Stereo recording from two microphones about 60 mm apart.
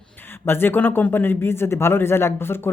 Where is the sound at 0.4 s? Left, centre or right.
Left.